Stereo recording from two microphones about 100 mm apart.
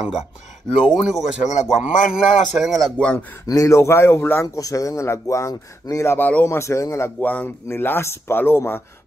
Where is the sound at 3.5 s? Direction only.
30° left (ahead or behind).